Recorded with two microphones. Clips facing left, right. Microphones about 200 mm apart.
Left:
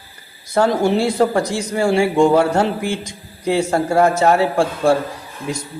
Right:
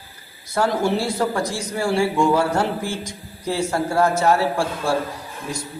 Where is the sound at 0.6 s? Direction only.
20° left (ahead or behind).